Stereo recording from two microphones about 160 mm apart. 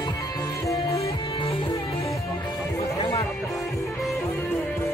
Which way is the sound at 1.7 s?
20° left (ahead or behind).